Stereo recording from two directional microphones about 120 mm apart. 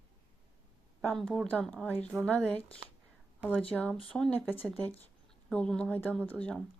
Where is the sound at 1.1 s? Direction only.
5° left (ahead or behind).